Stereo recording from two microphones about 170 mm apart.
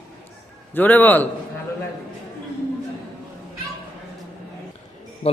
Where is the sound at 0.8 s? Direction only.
10° left (ahead or behind).